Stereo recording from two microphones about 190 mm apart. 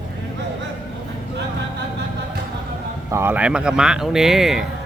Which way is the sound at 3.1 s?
10° right (ahead or behind).